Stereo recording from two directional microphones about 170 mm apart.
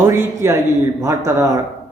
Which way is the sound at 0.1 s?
15° right (ahead or behind).